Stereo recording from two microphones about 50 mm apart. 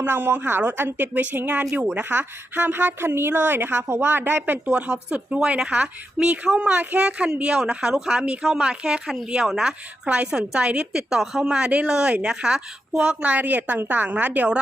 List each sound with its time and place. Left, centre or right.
0.1 s a woman's voice: right
0.6 s a woman's voice: right
4.7 s speech: centre
6.7 s a woman's voice: right
7.5 s speech: centre
11.1 s speech: centre
13.2 s a woman's voice: right